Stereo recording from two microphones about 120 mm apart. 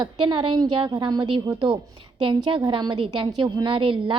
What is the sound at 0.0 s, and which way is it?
A woman's voice, 40° right (ahead or behind).